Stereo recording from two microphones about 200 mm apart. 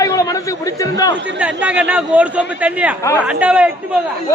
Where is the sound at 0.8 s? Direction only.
15° left (ahead or behind).